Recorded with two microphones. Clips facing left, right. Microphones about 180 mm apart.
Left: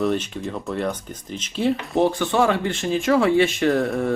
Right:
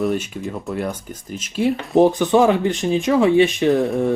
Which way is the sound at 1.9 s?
20° right (ahead or behind).